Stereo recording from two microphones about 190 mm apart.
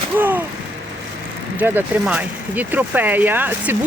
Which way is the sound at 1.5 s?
10° right (ahead or behind).